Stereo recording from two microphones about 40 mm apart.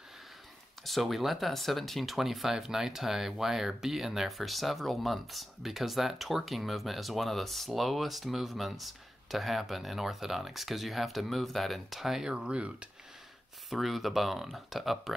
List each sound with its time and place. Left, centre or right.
0.8 s speech: centre
12.3 s speech: right
13.7 s speech: centre